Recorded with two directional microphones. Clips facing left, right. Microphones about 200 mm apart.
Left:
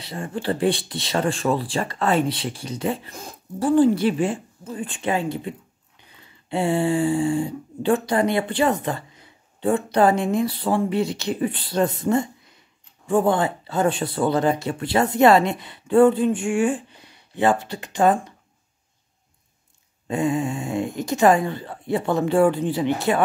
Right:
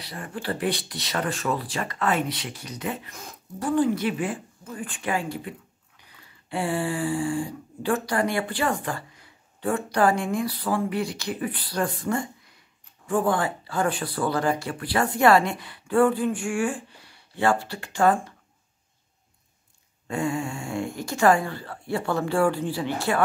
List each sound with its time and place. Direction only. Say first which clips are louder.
0.0 s speech: left 5 dB; 25° left (ahead or behind)
20.1 s speech: left 5 dB; 20° left (ahead or behind)